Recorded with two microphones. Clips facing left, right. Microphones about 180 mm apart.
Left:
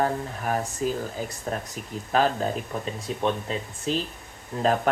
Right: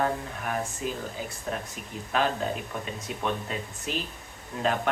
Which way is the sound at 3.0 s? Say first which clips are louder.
Left 5 dB; 30° left (ahead or behind).